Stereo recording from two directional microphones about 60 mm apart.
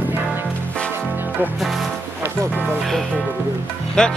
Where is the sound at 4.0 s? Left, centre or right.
Centre.